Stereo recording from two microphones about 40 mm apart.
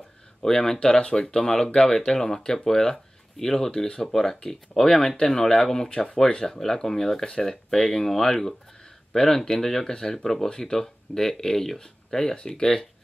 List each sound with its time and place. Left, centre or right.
0.4 s speech: centre